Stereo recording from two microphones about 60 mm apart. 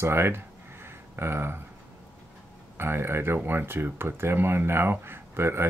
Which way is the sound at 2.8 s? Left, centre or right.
Right.